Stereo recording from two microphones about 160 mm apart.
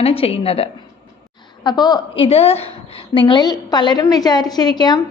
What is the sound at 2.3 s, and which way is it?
A woman's voice, 40° left (ahead or behind).